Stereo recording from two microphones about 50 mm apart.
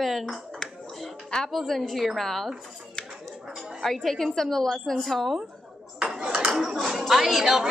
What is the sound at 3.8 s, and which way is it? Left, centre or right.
A woman's voice, centre.